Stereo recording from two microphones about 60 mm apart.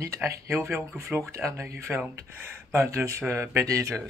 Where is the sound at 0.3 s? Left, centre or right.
Right.